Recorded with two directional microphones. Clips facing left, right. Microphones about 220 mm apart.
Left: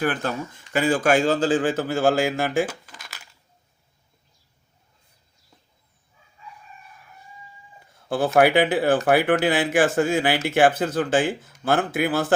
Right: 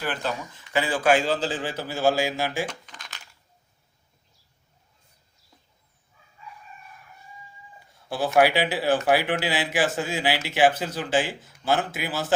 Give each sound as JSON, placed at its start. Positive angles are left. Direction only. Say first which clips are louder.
{"t": 0.0, "sound": "speech", "louder": "left 5 dB", "side_deg": 50}
{"t": 2.6, "sound": "a sound", "louder": "left 2 dB", "side_deg": 5}
{"t": 8.4, "sound": "speech", "louder": "left 3 dB", "side_deg": 55}